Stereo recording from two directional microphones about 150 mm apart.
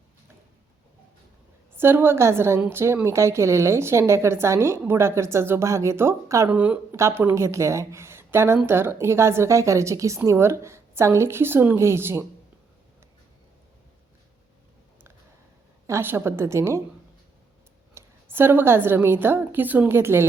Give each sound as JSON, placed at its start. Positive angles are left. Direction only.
{"t": 1.7, "sound": "speech", "side_deg": -15}
{"t": 15.9, "sound": "speech", "side_deg": -15}
{"t": 17.9, "sound": "a woman's voice", "side_deg": -15}